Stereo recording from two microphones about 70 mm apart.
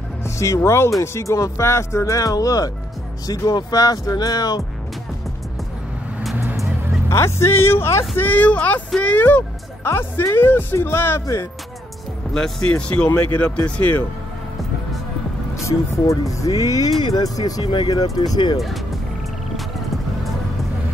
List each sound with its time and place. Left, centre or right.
0.2 s speech: left
6.4 s music: right
7.1 s speech: left
8.2 s speech: left
9.8 s speech: left
12.4 s speech: centre
15.6 s speech: left